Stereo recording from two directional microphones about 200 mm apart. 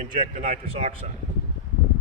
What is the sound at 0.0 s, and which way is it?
Speech, 40° right (ahead or behind).